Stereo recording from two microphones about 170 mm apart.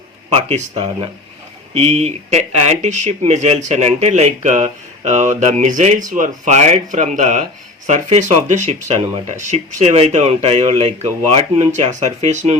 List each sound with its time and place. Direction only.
0.3 s speech: 35° right (ahead or behind)
1.7 s speech: 40° right (ahead or behind)